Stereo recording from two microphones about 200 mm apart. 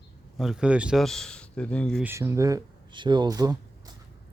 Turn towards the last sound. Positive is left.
turn(degrees=-20)  # may be behind; listen again after turning